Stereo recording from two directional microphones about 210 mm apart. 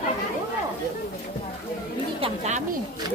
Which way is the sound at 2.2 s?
35° right (ahead or behind).